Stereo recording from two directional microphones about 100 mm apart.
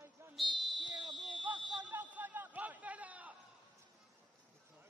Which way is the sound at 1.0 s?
50° right (ahead or behind).